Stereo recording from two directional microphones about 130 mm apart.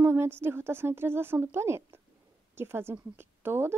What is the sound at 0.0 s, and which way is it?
A woman's voice, 20° right (ahead or behind).